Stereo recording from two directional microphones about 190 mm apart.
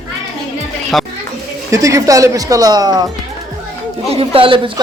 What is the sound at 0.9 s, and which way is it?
Speech, centre (ahead or behind).